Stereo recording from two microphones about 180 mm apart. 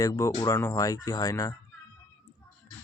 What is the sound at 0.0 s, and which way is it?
Speech, 20° left (ahead or behind).